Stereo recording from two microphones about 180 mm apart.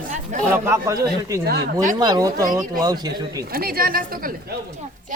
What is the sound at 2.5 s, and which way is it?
Speech, 45° right (ahead or behind).